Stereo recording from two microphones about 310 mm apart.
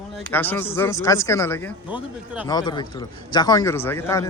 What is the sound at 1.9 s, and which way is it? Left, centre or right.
Speech, centre.